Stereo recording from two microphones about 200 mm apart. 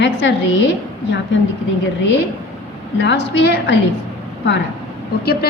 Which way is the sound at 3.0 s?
60° left (ahead or behind).